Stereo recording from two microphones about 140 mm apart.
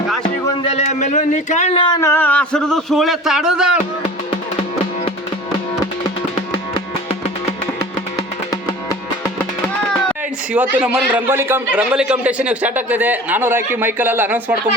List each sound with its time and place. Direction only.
0.6 s speech: 45° left (ahead or behind)
2.0 s a man's voice: 20° left (ahead or behind); by 3.8 s 5° right (ahead or behind)
10.5 s a man's voice: 10° right (ahead or behind)